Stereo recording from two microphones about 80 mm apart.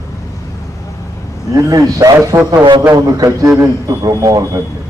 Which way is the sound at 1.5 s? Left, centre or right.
Right.